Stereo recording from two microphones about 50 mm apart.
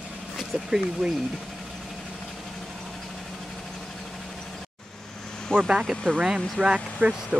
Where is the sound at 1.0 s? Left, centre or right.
Centre.